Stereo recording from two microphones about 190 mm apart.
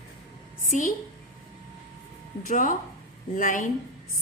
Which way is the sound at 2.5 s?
45° left (ahead or behind).